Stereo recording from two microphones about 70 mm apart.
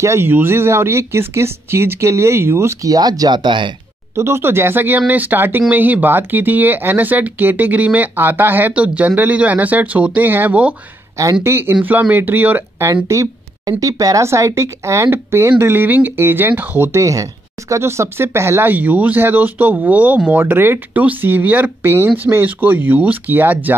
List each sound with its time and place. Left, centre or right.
0.0 s speech: right
0.3 s speech: right
2.8 s speech: right
4.1 s speech: right
11.4 s speech: right
13.1 s speech: right
14.2 s speech: right
16.9 s speech: right